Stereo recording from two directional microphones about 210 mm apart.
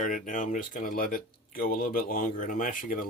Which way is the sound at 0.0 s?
40° left (ahead or behind).